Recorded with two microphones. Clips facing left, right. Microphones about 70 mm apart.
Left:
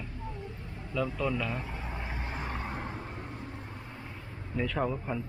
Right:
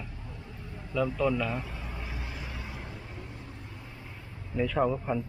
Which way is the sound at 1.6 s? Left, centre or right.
Left.